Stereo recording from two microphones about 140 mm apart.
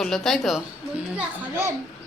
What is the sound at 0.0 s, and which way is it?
Speech, 5° left (ahead or behind).